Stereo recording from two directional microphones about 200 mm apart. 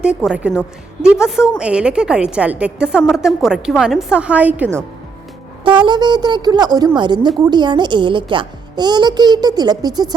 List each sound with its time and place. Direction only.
0.0 s a woman's voice: 5° right (ahead or behind)
5.6 s a child's voice: 25° right (ahead or behind)